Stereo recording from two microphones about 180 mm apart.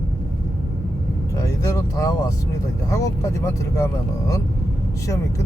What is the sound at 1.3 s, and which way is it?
Vehicle, 15° left (ahead or behind).